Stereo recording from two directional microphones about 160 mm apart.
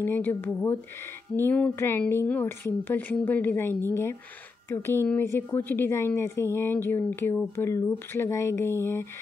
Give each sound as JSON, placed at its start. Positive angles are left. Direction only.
{"t": 0.0, "sound": "a woman's voice", "side_deg": 10}